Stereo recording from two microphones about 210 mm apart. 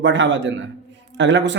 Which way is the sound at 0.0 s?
60° right (ahead or behind).